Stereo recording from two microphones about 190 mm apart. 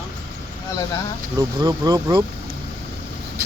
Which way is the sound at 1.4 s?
20° right (ahead or behind).